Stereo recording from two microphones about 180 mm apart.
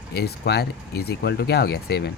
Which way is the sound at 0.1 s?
65° left (ahead or behind).